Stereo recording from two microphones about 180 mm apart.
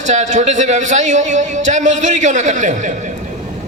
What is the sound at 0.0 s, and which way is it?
A man's voice, 40° right (ahead or behind).